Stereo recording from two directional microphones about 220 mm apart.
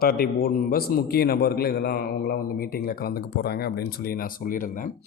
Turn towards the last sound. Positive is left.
turn(degrees=35)  # may be behind; listen again after turning